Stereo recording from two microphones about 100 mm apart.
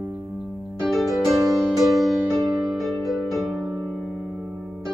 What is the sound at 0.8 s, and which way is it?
Music, centre (ahead or behind).